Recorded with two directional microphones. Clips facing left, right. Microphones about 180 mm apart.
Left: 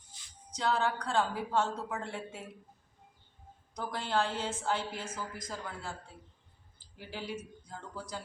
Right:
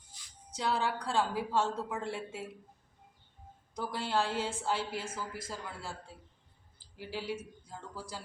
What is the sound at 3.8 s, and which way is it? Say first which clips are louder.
A woman's voice: even; 10° right (ahead or behind).